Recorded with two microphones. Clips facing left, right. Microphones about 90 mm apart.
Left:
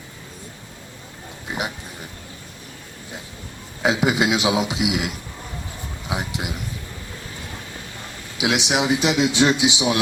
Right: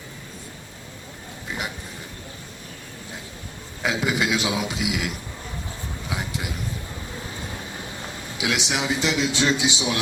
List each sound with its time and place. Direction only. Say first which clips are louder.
1.5 s a sound: left 3 dB; 20° left (ahead or behind)
3.8 s a man's voice: left 4 dB; 20° left (ahead or behind)
8.4 s a man's voice: left 5 dB; 20° left (ahead or behind)